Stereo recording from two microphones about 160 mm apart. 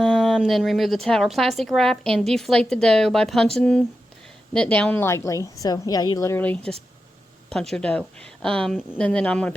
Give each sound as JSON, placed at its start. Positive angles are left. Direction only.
{"t": 0.0, "sound": "a woman's voice", "side_deg": 0}